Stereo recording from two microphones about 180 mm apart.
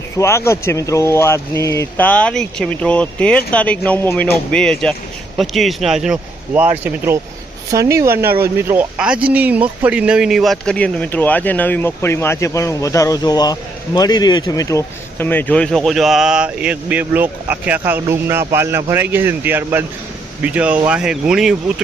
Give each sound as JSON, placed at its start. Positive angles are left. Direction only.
{"t": 0.2, "sound": "speech", "side_deg": 15}